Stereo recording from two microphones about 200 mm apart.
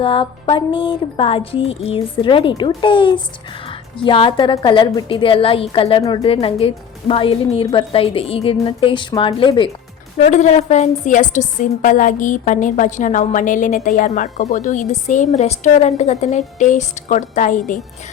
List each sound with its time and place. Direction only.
0.0 s speech: 25° left (ahead or behind)
6.0 s a woman's voice: 15° left (ahead or behind)
6.2 s speech: 30° left (ahead or behind)
10.2 s a woman's voice: 35° left (ahead or behind)